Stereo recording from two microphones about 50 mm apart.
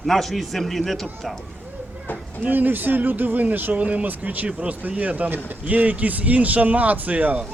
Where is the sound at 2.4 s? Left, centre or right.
Right.